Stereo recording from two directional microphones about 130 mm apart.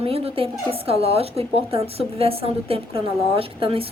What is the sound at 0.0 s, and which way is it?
A woman's voice, 45° right (ahead or behind).